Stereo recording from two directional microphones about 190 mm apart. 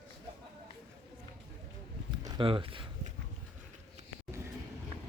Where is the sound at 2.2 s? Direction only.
25° right (ahead or behind).